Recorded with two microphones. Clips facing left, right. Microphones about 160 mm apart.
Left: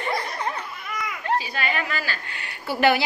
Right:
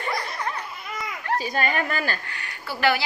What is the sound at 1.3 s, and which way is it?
Speech, 45° right (ahead or behind).